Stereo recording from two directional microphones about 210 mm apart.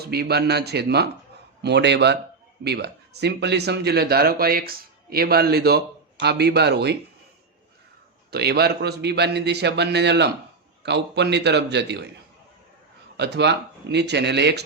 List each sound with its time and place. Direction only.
0.0 s speech: 50° right (ahead or behind)
8.3 s speech: 50° right (ahead or behind)
13.1 s speech: 55° right (ahead or behind)